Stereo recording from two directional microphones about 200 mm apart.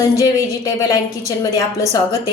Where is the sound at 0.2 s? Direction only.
15° left (ahead or behind).